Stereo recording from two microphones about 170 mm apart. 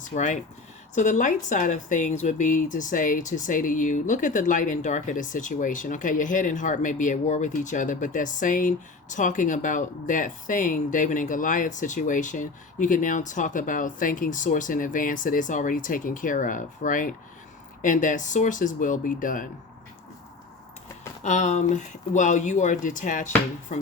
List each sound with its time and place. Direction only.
0.1 s speech: 45° left (ahead or behind)
21.2 s speech: 45° left (ahead or behind)